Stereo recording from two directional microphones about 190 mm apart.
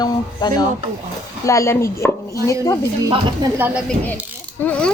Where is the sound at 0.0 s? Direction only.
20° left (ahead or behind).